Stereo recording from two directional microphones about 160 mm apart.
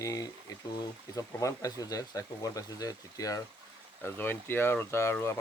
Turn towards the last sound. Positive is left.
turn(degrees=15)  # may be behind; listen again after turning